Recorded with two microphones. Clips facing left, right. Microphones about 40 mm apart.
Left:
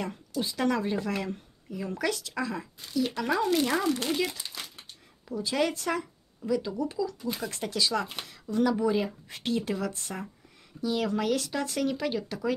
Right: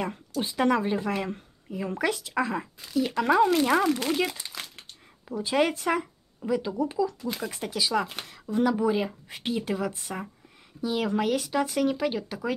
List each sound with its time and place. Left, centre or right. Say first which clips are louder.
0.4 s speech: right 3 dB; right
3.4 s speech: right 4 dB; centre
3.9 s speech: right 2 dB; centre
5.3 s speech: right 3 dB; right
7.3 s speech: even; centre